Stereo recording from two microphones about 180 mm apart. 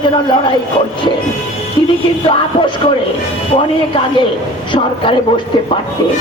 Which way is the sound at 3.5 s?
30° left (ahead or behind).